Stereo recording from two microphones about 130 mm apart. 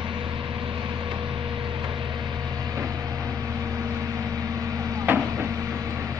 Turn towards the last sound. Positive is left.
turn(degrees=-15)  # may be behind; listen again after turning